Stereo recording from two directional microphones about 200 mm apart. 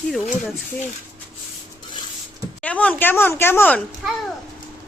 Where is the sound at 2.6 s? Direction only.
5° left (ahead or behind).